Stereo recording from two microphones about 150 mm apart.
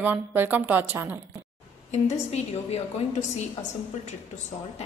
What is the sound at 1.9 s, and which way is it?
A woman's voice, 45° left (ahead or behind).